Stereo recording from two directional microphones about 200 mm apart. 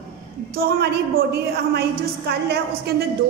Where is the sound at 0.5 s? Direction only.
55° right (ahead or behind).